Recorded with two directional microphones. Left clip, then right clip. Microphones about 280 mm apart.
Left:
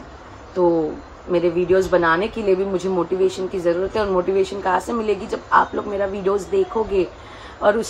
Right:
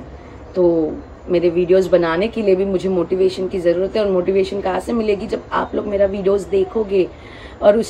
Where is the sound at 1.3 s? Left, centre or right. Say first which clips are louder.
Right 3 dB; centre.